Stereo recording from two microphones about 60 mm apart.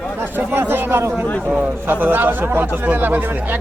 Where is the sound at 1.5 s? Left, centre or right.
Right.